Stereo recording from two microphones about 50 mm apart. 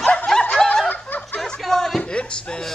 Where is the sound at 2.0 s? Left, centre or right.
Centre.